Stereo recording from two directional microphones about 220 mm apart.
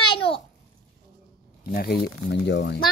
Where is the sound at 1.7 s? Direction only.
40° left (ahead or behind).